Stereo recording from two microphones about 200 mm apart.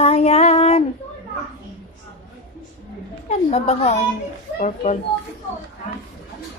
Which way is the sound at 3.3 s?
35° left (ahead or behind).